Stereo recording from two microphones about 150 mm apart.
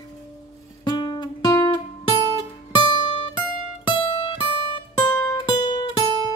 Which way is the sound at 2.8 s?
30° left (ahead or behind).